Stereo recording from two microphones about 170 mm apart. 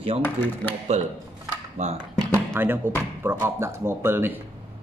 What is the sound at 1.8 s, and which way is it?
Speech, 40° right (ahead or behind).